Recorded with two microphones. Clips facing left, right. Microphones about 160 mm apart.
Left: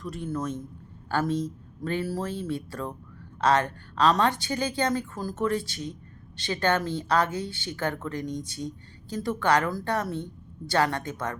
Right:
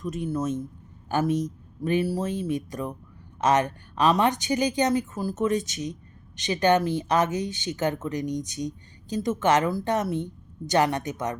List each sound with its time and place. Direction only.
0.0 s a woman's voice: 15° right (ahead or behind)